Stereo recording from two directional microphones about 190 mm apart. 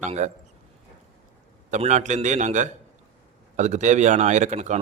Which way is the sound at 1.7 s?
40° right (ahead or behind).